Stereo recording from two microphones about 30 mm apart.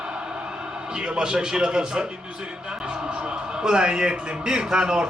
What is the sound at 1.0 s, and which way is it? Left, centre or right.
Speech, right.